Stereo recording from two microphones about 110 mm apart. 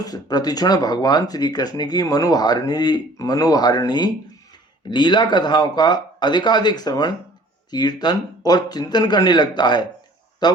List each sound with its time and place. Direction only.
0.0 s a man's voice: 35° left (ahead or behind)